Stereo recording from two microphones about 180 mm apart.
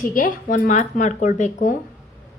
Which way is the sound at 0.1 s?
50° left (ahead or behind).